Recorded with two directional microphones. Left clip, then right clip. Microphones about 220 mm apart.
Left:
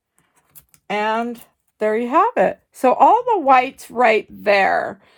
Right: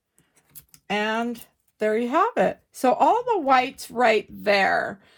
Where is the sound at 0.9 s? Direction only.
45° left (ahead or behind).